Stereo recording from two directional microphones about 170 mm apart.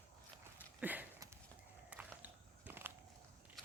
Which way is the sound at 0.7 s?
10° right (ahead or behind).